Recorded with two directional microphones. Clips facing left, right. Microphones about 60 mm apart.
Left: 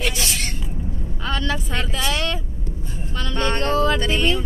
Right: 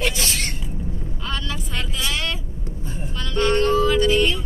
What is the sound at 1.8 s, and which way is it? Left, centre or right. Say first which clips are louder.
Vehicle: left 3 dB; left.